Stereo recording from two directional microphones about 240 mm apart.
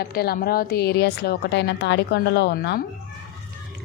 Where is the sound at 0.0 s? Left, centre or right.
Left.